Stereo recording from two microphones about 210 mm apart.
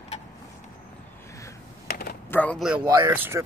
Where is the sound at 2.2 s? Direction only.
5° left (ahead or behind).